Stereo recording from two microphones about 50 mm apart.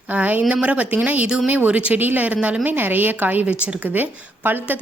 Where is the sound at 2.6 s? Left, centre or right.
Right.